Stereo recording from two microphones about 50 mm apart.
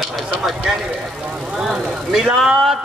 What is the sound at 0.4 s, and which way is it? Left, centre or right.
Vehicle, centre.